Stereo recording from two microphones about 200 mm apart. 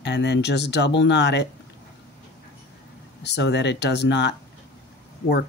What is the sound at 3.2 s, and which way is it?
Speech, 60° left (ahead or behind).